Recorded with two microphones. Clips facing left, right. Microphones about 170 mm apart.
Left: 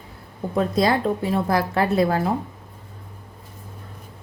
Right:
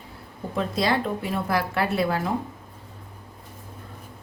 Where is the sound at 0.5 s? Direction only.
45° left (ahead or behind).